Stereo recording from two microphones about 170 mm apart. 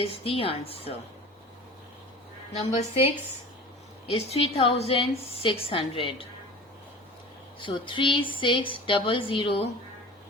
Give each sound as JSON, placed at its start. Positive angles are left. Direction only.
{"t": 0.0, "sound": "a woman's voice", "side_deg": 35}
{"t": 2.5, "sound": "a woman's voice", "side_deg": 35}
{"t": 4.1, "sound": "a woman's voice", "side_deg": 35}
{"t": 7.6, "sound": "a woman's voice", "side_deg": 30}